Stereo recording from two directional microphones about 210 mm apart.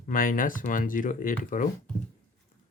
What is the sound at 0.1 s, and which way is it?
Speech, 40° left (ahead or behind).